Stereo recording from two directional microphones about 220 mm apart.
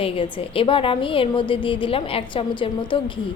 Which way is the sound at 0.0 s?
25° left (ahead or behind).